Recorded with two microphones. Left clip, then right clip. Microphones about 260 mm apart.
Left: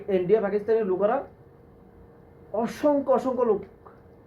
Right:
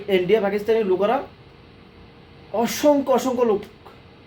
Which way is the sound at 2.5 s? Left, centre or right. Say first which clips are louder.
Right 5 dB; centre.